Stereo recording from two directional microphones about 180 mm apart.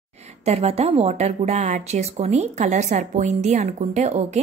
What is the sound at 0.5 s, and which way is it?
A woman's voice, 35° right (ahead or behind).